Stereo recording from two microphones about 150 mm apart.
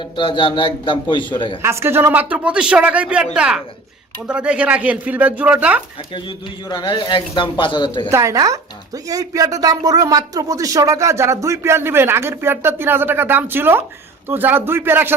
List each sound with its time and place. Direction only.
0.2 s speech: 35° left (ahead or behind)
1.6 s a man's voice: 15° right (ahead or behind)
6.1 s speech: 30° left (ahead or behind)
8.1 s a man's voice: 20° right (ahead or behind)